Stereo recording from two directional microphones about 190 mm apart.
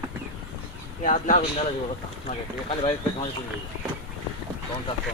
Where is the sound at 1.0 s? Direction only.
45° left (ahead or behind).